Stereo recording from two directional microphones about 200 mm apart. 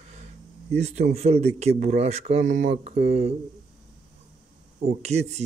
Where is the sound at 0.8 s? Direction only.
35° right (ahead or behind).